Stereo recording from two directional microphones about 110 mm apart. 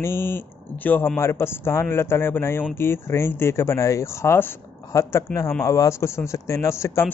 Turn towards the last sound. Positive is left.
turn(degrees=25)  # may be behind; listen again after turning